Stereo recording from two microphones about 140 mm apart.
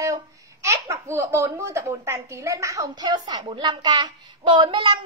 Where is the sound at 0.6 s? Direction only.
20° right (ahead or behind).